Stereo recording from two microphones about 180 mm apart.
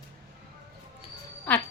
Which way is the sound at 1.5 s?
10° left (ahead or behind).